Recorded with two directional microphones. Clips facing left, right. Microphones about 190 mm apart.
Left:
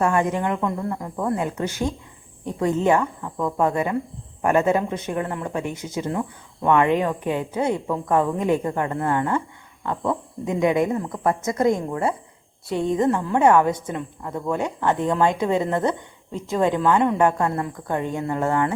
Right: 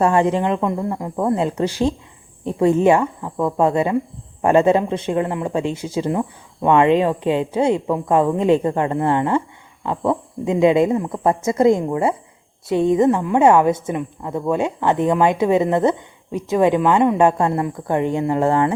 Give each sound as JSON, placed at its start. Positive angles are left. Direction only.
{"t": 0.0, "sound": "a woman's voice", "side_deg": -30}
{"t": 2.4, "sound": "a woman's voice", "side_deg": -20}